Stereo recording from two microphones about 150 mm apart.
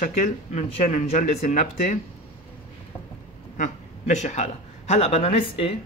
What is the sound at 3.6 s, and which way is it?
A man's voice, 55° left (ahead or behind).